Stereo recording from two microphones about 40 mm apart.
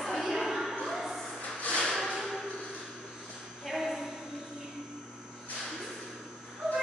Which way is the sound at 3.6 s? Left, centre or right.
Centre.